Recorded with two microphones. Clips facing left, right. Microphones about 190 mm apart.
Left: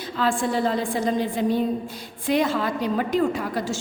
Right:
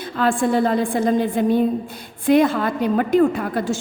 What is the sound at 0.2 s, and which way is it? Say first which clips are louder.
A woman's voice: right 5 dB; 55° right (ahead or behind).